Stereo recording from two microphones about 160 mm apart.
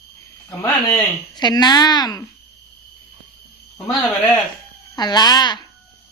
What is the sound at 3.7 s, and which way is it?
Speech, 15° left (ahead or behind).